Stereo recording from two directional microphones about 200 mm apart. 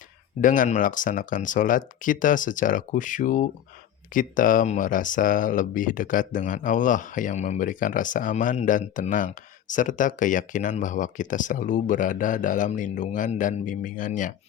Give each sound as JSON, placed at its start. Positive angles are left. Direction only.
{"t": 0.4, "sound": "speech", "side_deg": 40}